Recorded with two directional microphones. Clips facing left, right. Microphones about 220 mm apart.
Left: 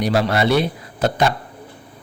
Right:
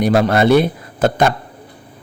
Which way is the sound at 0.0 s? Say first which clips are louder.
Right 5 dB; 50° right (ahead or behind).